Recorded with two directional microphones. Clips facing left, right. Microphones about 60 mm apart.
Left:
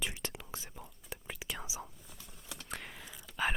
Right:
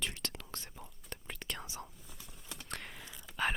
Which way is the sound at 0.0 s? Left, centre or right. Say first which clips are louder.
Left 1 dB; centre.